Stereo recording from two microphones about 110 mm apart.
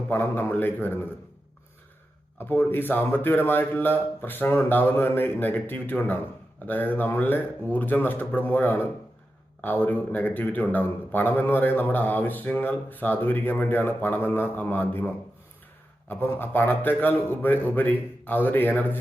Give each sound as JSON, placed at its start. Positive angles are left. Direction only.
{"t": 0.1, "sound": "a man's voice", "side_deg": 20}
{"t": 2.4, "sound": "a man's voice", "side_deg": 20}